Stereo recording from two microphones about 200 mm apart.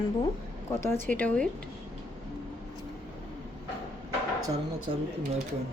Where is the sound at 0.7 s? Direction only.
15° left (ahead or behind).